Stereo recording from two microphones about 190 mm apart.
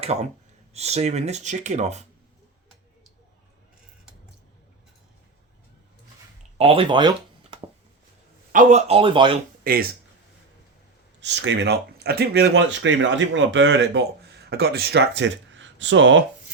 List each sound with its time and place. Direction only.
0.0 s speech: 35° right (ahead or behind)
6.6 s speech: 30° right (ahead or behind)
8.5 s speech: 35° right (ahead or behind)
9.7 s speech: 50° right (ahead or behind)
11.2 s speech: 65° right (ahead or behind)
14.5 s speech: 55° right (ahead or behind); by 16.2 s 75° right (ahead or behind)